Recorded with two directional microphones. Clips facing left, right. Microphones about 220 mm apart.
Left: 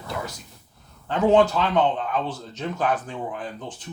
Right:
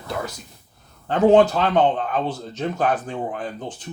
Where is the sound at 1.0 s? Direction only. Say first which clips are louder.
Right 3 dB; 45° right (ahead or behind).